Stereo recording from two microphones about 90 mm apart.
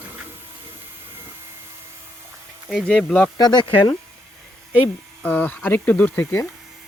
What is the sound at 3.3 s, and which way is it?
Speech, 50° left (ahead or behind).